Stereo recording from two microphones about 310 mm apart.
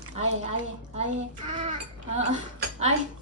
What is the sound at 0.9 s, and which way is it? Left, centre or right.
Speech, right.